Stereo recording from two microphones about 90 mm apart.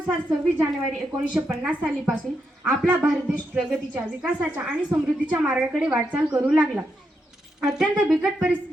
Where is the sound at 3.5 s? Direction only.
15° right (ahead or behind).